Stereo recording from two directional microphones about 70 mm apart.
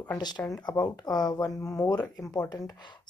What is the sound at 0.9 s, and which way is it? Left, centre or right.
Speech, left.